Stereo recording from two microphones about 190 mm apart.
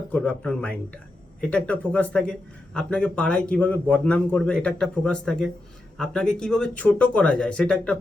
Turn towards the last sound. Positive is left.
turn(degrees=5)  # may be behind; listen again after turning